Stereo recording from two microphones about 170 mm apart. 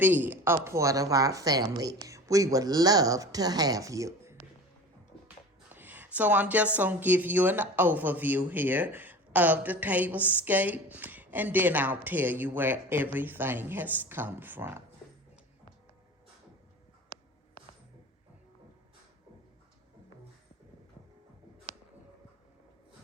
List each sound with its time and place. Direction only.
0.0 s speech: 10° right (ahead or behind)
5.7 s speech: 10° right (ahead or behind)